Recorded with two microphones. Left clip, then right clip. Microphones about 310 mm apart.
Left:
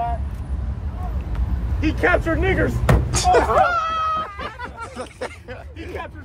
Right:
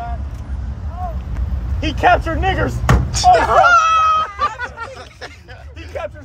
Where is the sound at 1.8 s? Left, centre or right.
Centre.